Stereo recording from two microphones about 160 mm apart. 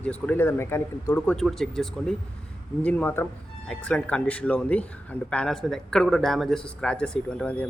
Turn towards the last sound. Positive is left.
turn(degrees=5)  # may be behind; listen again after turning